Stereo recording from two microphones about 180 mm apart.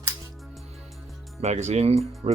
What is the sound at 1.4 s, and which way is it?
Speech, 40° right (ahead or behind).